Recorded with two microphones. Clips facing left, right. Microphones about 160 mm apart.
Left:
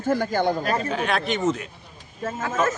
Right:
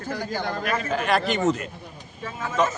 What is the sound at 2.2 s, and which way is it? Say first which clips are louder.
Speech: left 5 dB; 45° left (ahead or behind).